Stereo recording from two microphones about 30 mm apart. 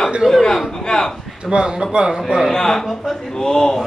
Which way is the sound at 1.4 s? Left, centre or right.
Right.